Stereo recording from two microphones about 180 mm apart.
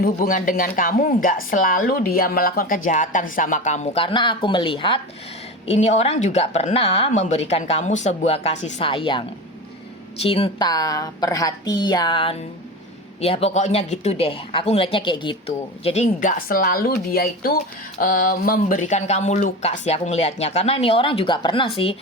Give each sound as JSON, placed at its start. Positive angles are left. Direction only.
{"t": 0.0, "sound": "speech", "side_deg": 50}
{"t": 10.2, "sound": "a woman's voice", "side_deg": 30}
{"t": 16.5, "sound": "speech", "side_deg": 55}